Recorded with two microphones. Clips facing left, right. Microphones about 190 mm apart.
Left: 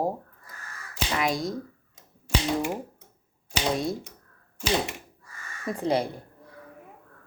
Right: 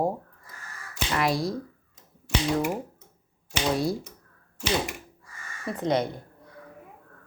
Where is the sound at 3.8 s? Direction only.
Centre (ahead or behind).